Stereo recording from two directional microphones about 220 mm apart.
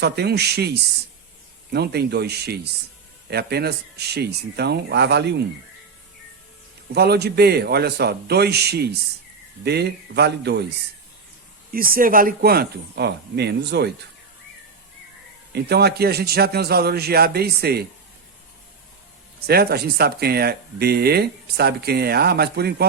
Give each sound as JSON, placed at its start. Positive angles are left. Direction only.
{"t": 0.0, "sound": "speech", "side_deg": -50}
{"t": 6.9, "sound": "speech", "side_deg": -45}
{"t": 11.7, "sound": "speech", "side_deg": -40}
{"t": 15.5, "sound": "speech", "side_deg": -45}
{"t": 19.4, "sound": "speech", "side_deg": -45}